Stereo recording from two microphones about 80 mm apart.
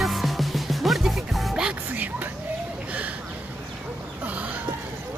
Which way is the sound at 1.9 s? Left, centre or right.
Right.